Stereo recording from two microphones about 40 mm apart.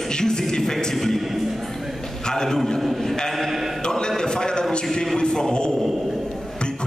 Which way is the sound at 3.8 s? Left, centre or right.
Centre.